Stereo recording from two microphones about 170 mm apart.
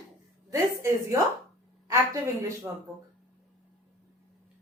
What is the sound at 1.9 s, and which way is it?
Speech, 15° right (ahead or behind).